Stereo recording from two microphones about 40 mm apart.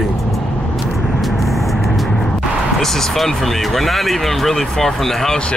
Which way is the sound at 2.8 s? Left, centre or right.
Centre.